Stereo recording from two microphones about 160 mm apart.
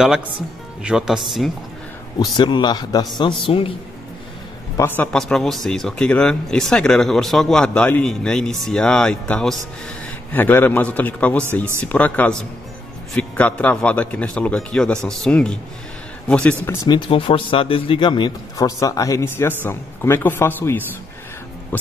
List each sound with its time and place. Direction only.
0.8 s speech: 5° right (ahead or behind)
2.3 s a man's voice: 30° left (ahead or behind)
4.7 s a man's voice: 10° left (ahead or behind)
16.6 s speech: 25° left (ahead or behind)